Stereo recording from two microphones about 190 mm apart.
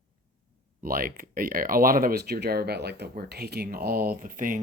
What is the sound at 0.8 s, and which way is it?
Speech, 50° right (ahead or behind).